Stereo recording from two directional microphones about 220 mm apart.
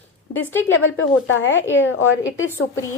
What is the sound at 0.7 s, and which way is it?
A woman's voice, 60° left (ahead or behind).